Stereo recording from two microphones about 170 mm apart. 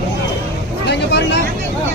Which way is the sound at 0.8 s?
90° left.